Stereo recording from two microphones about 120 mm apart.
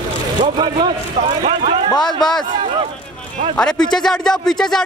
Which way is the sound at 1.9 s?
35° left (ahead or behind).